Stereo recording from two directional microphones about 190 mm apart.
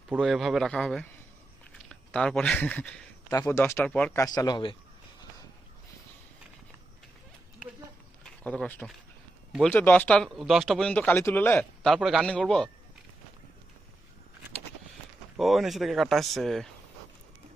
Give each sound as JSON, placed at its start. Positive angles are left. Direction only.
{"t": 0.1, "sound": "speech", "side_deg": 0}
{"t": 4.2, "sound": "speech", "side_deg": 20}
{"t": 8.2, "sound": "speech", "side_deg": 5}
{"t": 15.4, "sound": "speech", "side_deg": 0}